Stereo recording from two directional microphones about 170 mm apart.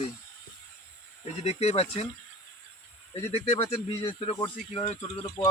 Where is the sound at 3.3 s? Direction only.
35° left (ahead or behind).